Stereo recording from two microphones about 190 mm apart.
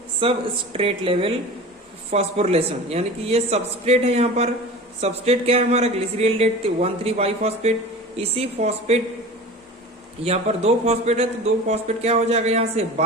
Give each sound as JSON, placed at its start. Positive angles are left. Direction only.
{"t": 0.2, "sound": "a woman's voice", "side_deg": -30}
{"t": 10.2, "sound": "speech", "side_deg": -35}